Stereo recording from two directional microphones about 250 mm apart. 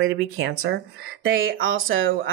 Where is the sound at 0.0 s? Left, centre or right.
Right.